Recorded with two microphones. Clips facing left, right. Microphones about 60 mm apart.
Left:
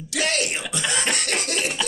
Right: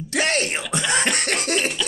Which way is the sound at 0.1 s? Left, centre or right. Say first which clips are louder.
Right 2 dB; right.